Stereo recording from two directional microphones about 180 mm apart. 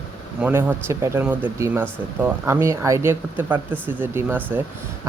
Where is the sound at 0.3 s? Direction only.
10° right (ahead or behind).